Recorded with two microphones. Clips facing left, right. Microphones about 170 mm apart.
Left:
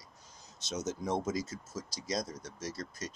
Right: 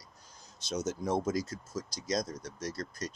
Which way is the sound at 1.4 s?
25° left (ahead or behind).